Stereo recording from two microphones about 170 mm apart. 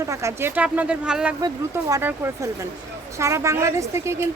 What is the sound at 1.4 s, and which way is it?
Speech, 20° right (ahead or behind).